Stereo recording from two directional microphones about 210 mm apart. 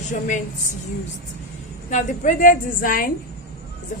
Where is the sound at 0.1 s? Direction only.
40° left (ahead or behind).